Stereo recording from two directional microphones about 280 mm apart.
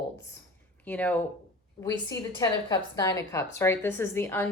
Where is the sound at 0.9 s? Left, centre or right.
Centre.